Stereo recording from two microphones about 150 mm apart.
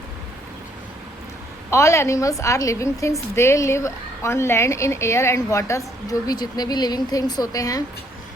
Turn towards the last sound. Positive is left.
turn(degrees=25)  # may be behind; listen again after turning